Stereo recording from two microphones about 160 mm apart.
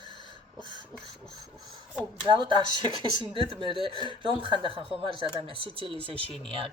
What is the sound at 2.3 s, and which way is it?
Speech, 30° right (ahead or behind).